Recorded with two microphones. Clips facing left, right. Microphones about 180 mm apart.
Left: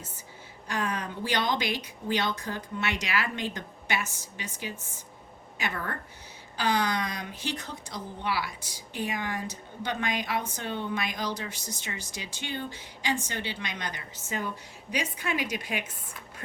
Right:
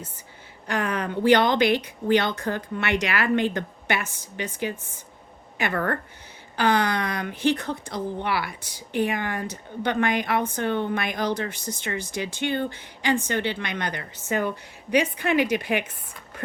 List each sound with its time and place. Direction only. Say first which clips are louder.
0.7 s speech: right 5 dB; 60° right (ahead or behind)